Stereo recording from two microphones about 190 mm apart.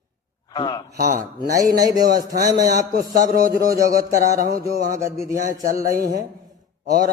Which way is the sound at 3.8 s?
50° right (ahead or behind).